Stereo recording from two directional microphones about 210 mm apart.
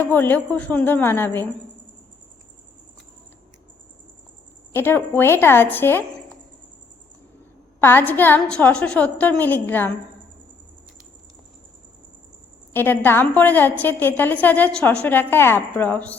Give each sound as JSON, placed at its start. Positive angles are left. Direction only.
{"t": 0.0, "sound": "a woman's voice", "side_deg": 10}
{"t": 4.7, "sound": "a woman's voice", "side_deg": 10}
{"t": 7.8, "sound": "a woman's voice", "side_deg": 10}
{"t": 12.7, "sound": "a woman's voice", "side_deg": 10}